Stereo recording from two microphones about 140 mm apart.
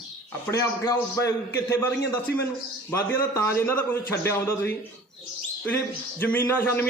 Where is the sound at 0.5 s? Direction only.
25° left (ahead or behind).